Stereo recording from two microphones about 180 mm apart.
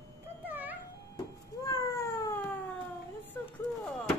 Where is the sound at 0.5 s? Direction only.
10° right (ahead or behind).